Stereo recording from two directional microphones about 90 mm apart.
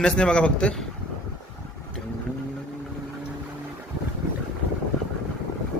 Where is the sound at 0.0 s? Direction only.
10° left (ahead or behind).